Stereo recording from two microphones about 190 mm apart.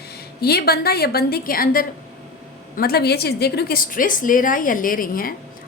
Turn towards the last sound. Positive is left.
turn(degrees=50)  # may be behind; listen again after turning